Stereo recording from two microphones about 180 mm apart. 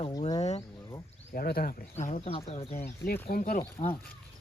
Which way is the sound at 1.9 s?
40° left (ahead or behind).